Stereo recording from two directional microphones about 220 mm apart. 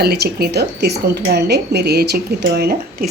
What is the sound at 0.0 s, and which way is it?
Speech, 45° right (ahead or behind).